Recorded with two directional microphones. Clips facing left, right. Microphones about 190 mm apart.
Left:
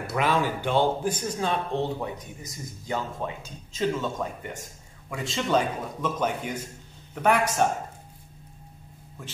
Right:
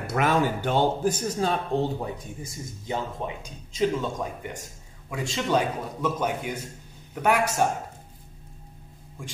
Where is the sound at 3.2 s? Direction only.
10° right (ahead or behind).